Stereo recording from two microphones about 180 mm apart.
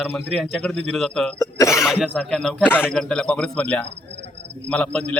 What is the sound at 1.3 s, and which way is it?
Cough, 15° left (ahead or behind).